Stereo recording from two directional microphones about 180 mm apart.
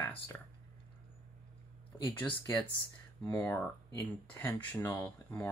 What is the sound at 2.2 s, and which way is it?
Speech, 10° left (ahead or behind).